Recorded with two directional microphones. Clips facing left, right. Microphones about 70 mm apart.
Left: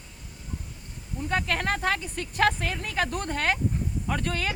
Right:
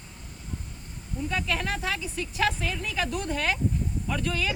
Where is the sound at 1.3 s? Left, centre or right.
Left.